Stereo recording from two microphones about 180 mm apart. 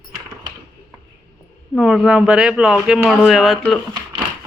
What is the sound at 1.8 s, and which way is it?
Speech, centre (ahead or behind).